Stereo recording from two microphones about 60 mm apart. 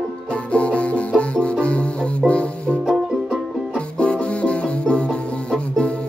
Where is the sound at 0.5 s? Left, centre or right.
Left.